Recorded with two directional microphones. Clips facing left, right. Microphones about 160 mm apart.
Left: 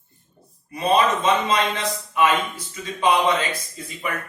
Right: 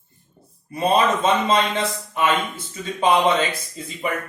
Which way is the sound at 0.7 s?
25° right (ahead or behind).